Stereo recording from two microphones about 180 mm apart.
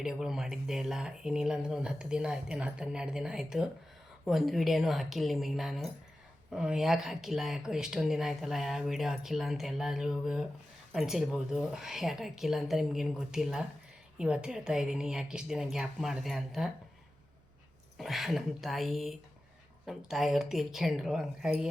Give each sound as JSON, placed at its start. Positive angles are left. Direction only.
{"t": 0.0, "sound": "speech", "side_deg": 0}
{"t": 17.9, "sound": "speech", "side_deg": 0}